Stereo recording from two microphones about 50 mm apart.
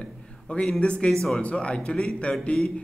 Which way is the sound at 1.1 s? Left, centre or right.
Centre.